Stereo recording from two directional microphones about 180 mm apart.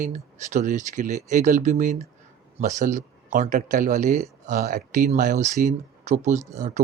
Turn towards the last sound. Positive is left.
turn(degrees=-40)  # may be behind; listen again after turning